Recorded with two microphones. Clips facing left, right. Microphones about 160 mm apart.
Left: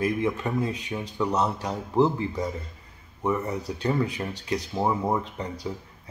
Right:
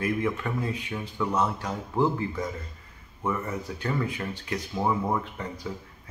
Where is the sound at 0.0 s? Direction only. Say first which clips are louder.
Left 2 dB; 20° left (ahead or behind).